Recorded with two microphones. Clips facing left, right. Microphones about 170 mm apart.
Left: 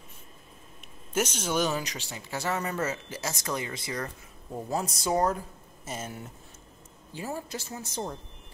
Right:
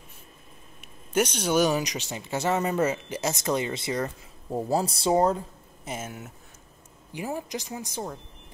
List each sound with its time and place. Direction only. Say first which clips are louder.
0.7 s a sound: right 4 dB; centre (ahead or behind)
1.6 s speech: right 6 dB; 15° right (ahead or behind)
4.5 s speech: right 6 dB; 35° right (ahead or behind)
5.9 s a woman's voice: right 2 dB; 5° right (ahead or behind)